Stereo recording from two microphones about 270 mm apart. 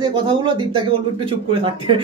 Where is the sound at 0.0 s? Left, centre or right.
Centre.